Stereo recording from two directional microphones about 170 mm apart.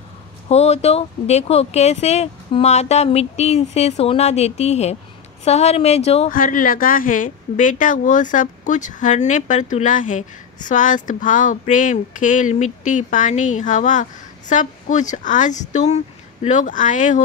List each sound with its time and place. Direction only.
0.5 s speech: 40° left (ahead or behind)
6.3 s speech: 55° left (ahead or behind)